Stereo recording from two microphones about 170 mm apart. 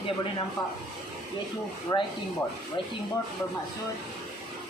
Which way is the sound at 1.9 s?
25° left (ahead or behind).